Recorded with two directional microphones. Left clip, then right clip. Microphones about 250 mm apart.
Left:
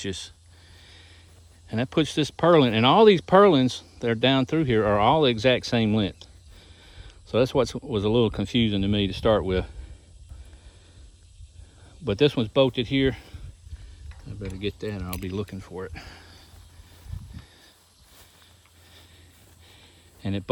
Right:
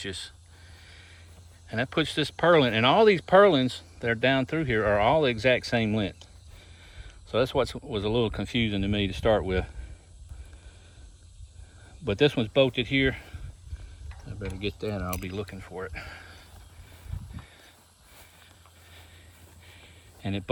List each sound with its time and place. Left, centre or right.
0.0 s speech: left
1.6 s speech: left
12.0 s speech: centre
19.8 s a sound: centre